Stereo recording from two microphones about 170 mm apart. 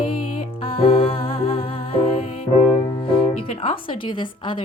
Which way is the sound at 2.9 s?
30° left (ahead or behind).